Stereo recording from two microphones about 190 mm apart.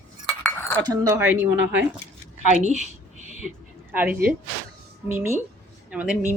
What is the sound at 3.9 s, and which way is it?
A woman's voice, 10° right (ahead or behind).